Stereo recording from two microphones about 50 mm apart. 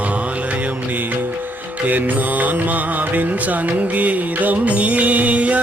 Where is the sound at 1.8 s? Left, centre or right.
Right.